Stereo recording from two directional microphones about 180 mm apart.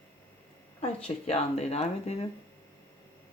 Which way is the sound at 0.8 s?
35° left (ahead or behind).